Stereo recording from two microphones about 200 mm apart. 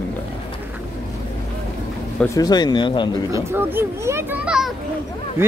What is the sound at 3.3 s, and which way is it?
Speech, 10° right (ahead or behind).